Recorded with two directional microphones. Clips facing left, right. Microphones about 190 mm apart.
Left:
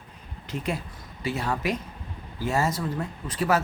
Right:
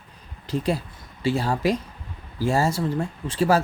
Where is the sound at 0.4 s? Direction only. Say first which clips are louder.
Right 6 dB; 35° right (ahead or behind).